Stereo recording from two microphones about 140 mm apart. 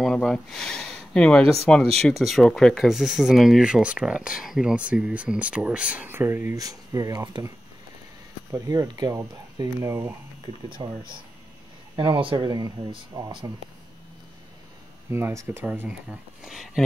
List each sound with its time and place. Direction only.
0.0 s speech: centre (ahead or behind); by 10.1 s 20° right (ahead or behind)
10.4 s speech: 35° right (ahead or behind)
15.0 s speech: 15° right (ahead or behind); by 16.8 s centre (ahead or behind)